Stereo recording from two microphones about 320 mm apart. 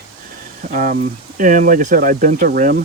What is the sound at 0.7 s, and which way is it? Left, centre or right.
Speech, right.